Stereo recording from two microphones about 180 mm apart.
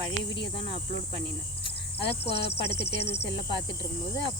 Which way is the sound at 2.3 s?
65° left (ahead or behind).